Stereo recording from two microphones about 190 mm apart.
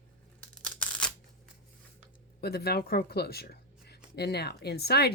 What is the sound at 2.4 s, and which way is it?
Speech, 55° left (ahead or behind).